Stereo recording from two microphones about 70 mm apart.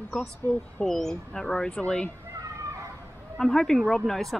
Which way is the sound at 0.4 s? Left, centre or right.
Right.